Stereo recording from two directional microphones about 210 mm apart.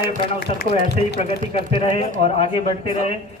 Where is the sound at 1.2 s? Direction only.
30° left (ahead or behind).